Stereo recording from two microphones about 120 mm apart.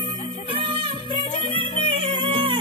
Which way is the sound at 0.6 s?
45° right (ahead or behind).